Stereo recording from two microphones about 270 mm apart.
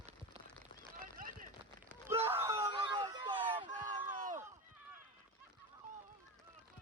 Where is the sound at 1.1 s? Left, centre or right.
Right.